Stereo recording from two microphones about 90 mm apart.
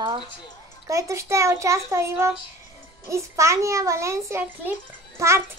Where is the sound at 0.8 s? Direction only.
35° right (ahead or behind).